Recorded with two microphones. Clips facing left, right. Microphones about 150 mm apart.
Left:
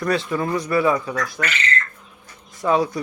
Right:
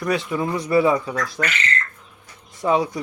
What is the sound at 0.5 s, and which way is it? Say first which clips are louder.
Speech: right 2 dB; 25° right (ahead or behind).